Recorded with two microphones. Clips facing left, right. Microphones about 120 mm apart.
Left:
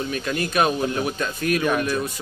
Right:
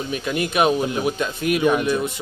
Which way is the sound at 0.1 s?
15° right (ahead or behind).